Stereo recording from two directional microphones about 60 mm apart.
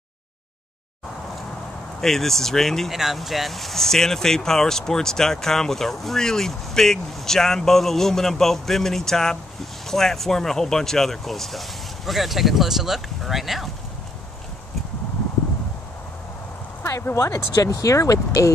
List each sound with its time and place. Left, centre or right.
2.0 s speech: centre
17.0 s speech: left